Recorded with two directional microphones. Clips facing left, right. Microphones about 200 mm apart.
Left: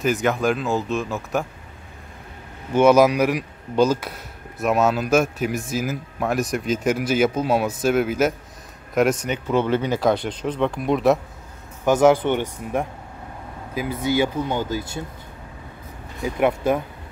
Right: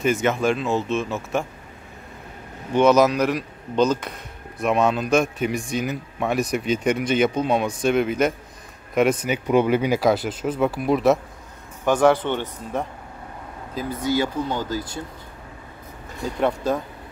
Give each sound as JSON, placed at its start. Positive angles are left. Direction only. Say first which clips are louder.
{"t": 0.0, "sound": "speech", "louder": "even", "side_deg": 0}
{"t": 2.7, "sound": "speech", "louder": "left 1 dB", "side_deg": 10}
{"t": 9.5, "sound": "speech", "louder": "right 2 dB", "side_deg": -10}
{"t": 11.8, "sound": "speech", "louder": "left 2 dB", "side_deg": 10}
{"t": 13.9, "sound": "speech", "louder": "left 1 dB", "side_deg": 20}